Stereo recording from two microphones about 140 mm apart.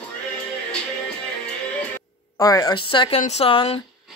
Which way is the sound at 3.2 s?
50° left (ahead or behind).